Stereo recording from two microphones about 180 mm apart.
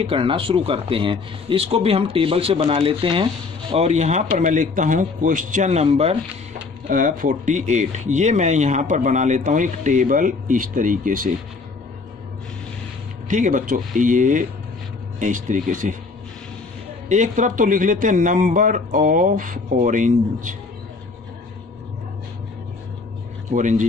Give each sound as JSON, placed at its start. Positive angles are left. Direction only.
{"t": 0.0, "sound": "speech", "side_deg": -30}
{"t": 6.9, "sound": "speech", "side_deg": -50}
{"t": 13.3, "sound": "speech", "side_deg": -45}
{"t": 17.1, "sound": "speech", "side_deg": -45}
{"t": 23.5, "sound": "speech", "side_deg": -45}